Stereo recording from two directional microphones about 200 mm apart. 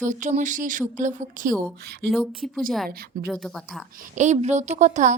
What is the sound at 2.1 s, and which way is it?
Speech, centre (ahead or behind).